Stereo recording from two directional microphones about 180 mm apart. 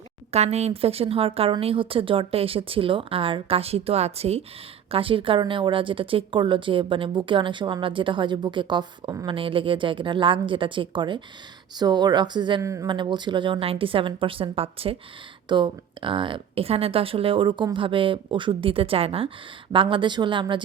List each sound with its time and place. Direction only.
0.3 s a woman's voice: 35° right (ahead or behind)